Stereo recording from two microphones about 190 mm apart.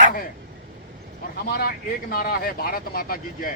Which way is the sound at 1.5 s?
55° left (ahead or behind).